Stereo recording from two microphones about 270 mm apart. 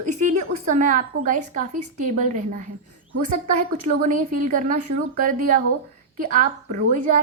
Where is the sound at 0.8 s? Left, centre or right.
Right.